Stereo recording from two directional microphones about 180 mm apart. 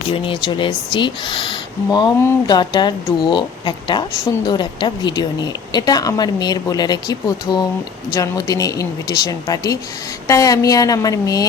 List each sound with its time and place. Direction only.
0.1 s a woman's voice: 30° left (ahead or behind)